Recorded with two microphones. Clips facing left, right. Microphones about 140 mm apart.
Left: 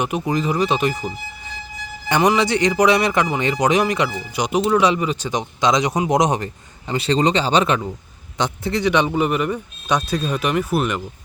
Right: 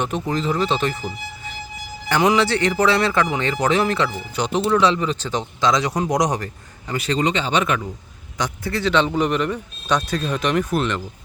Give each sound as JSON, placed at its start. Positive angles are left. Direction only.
{"t": 0.0, "sound": "a man's voice", "side_deg": 10}
{"t": 8.4, "sound": "speech", "side_deg": 20}